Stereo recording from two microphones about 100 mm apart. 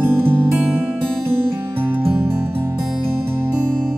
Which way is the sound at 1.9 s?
20° right (ahead or behind).